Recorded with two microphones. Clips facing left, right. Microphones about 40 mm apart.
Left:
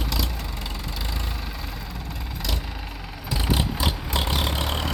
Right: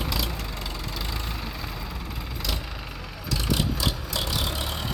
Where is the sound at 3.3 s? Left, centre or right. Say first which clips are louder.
Left 1 dB; left.